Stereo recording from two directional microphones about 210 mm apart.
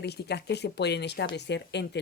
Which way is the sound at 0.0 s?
50° left (ahead or behind).